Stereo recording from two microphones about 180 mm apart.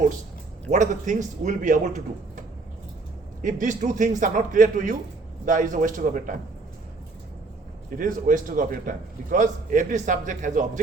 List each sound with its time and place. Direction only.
0.7 s a man's voice: 45° right (ahead or behind)
3.4 s a man's voice: 45° right (ahead or behind)
7.9 s a man's voice: 50° right (ahead or behind)